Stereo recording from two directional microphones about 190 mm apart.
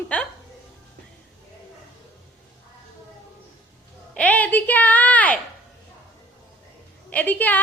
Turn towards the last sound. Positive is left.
turn(degrees=10)  # may be behind; listen again after turning